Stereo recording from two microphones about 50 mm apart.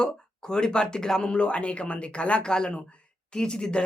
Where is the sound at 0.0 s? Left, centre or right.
Centre.